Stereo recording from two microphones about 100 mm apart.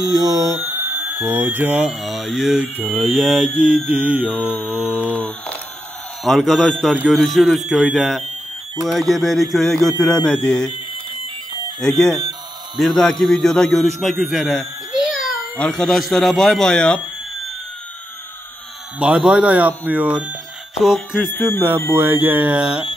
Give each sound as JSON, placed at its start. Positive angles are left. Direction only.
{"t": 0.0, "sound": "speech", "side_deg": -40}
{"t": 0.8, "sound": "speech", "side_deg": -20}
{"t": 1.8, "sound": "speech", "side_deg": -5}
{"t": 3.5, "sound": "speech", "side_deg": -15}
{"t": 5.1, "sound": "speech", "side_deg": 10}
{"t": 6.2, "sound": "speech", "side_deg": 0}
{"t": 11.8, "sound": "a man's voice", "side_deg": 5}
{"t": 15.5, "sound": "speech", "side_deg": 10}
{"t": 18.9, "sound": "speech", "side_deg": -10}
{"t": 20.8, "sound": "speech", "side_deg": 0}
{"t": 21.4, "sound": "speech", "side_deg": 20}
{"t": 21.9, "sound": "speech", "side_deg": -20}